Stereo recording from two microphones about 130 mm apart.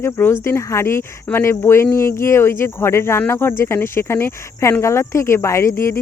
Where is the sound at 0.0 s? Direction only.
20° left (ahead or behind).